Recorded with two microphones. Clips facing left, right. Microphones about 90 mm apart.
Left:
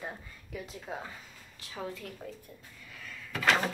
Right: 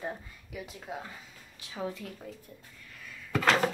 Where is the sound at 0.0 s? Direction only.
10° right (ahead or behind).